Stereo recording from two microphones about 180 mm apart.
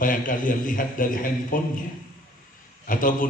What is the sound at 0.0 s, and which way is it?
A man's voice, 50° left (ahead or behind).